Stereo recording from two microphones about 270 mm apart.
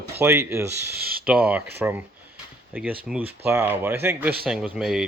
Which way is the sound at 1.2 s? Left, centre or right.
Centre.